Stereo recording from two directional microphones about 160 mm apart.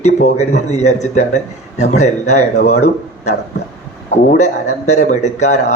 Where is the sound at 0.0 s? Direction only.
45° left (ahead or behind).